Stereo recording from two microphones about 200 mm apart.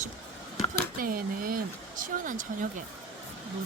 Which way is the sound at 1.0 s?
45° right (ahead or behind).